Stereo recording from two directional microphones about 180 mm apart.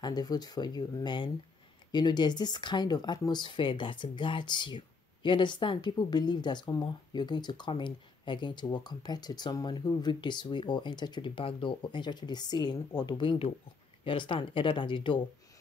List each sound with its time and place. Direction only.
0.0 s speech: 20° left (ahead or behind)